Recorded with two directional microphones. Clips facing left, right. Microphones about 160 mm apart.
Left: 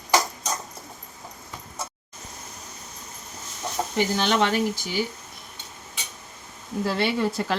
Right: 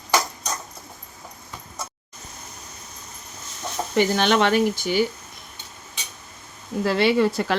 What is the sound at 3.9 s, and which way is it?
Speech, 65° right (ahead or behind).